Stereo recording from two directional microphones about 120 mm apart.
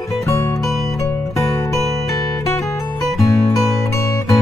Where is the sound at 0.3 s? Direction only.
25° left (ahead or behind).